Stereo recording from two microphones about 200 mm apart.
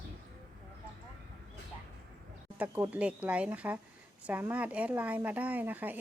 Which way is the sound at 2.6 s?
10° right (ahead or behind).